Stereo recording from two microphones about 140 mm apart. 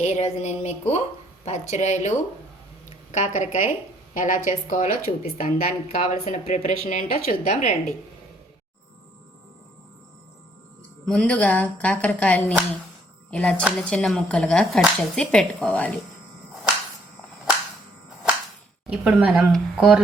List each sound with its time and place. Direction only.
0.0 s speech: 50° left (ahead or behind)
11.0 s speech: 5° left (ahead or behind)
18.9 s speech: 10° right (ahead or behind)